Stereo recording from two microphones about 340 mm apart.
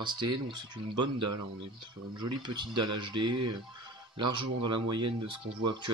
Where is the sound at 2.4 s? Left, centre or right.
Centre.